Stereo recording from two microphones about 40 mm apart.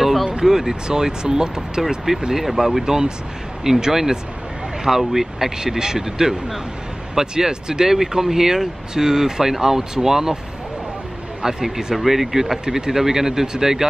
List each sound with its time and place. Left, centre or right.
0.0 s a sound: centre
0.5 s speech: centre
2.8 s speech: centre
11.4 s speech: centre